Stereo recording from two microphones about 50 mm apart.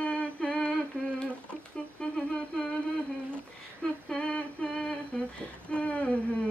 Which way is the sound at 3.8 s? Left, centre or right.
Left.